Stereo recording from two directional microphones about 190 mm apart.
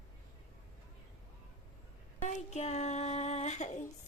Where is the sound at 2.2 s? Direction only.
35° left (ahead or behind).